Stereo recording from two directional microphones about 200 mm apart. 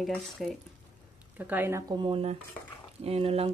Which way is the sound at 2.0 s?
30° right (ahead or behind).